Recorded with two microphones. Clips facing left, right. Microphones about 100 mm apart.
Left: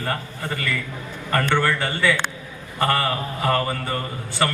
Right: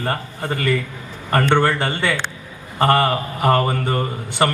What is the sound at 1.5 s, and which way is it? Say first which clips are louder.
A man's voice: right 4 dB; 20° right (ahead or behind).